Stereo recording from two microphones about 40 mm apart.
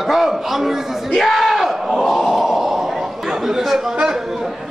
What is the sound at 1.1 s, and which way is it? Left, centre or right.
Crowd, centre.